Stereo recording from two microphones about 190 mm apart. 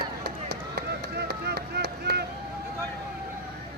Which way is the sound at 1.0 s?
60° right (ahead or behind).